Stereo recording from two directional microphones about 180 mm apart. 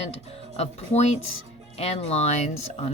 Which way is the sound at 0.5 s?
35° left (ahead or behind).